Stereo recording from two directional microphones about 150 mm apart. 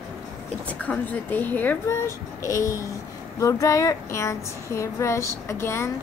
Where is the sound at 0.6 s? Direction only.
10° left (ahead or behind).